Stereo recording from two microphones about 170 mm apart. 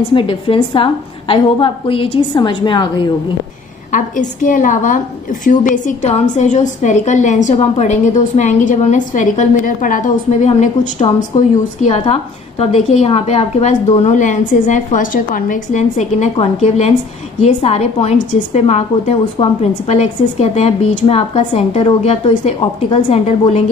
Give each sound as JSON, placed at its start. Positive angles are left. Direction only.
{"t": 0.1, "sound": "a woman's voice", "side_deg": 30}
{"t": 3.9, "sound": "a woman's voice", "side_deg": 50}